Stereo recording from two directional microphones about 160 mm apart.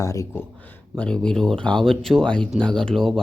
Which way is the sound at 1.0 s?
5° left (ahead or behind).